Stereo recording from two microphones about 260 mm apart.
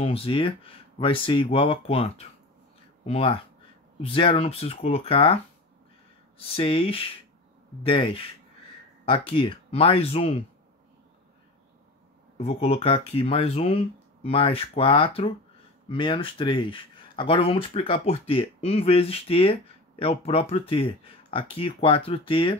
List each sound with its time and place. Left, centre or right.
0.0 s speech: left
12.4 s speech: left